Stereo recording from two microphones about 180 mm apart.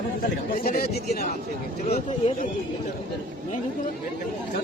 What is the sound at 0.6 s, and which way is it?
Speech, 55° left (ahead or behind).